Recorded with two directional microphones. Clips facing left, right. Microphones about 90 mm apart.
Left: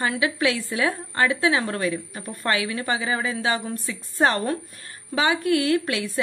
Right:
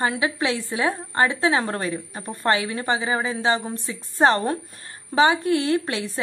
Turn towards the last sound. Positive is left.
turn(degrees=-25)  # may be behind; listen again after turning